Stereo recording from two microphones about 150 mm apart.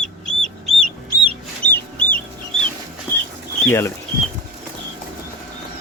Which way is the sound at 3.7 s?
15° left (ahead or behind).